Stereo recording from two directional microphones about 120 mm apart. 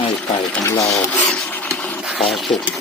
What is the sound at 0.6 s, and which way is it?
Speech, 25° left (ahead or behind).